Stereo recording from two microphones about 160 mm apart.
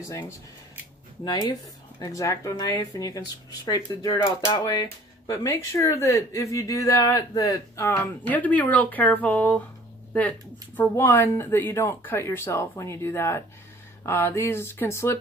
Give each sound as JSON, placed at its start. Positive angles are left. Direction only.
{"t": 0.1, "sound": "speech", "side_deg": 20}
{"t": 10.8, "sound": "speech", "side_deg": 15}